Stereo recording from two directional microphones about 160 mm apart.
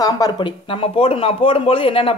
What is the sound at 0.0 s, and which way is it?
Speech, 25° left (ahead or behind).